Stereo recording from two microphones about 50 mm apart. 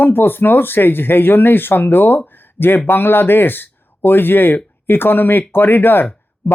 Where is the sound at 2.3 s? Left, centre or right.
Left.